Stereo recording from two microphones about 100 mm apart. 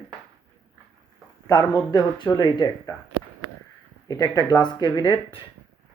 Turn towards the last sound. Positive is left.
turn(degrees=50)  # may be behind; listen again after turning